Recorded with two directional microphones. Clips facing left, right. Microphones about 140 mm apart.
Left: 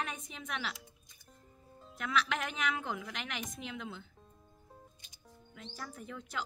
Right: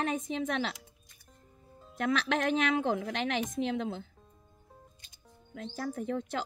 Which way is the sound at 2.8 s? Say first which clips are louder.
Right 9 dB; 50° right (ahead or behind).